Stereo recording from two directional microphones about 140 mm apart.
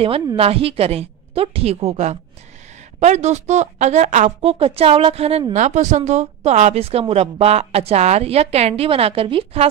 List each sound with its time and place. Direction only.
0.4 s a woman's voice: 45° right (ahead or behind)
5.5 s a woman's voice: 55° right (ahead or behind)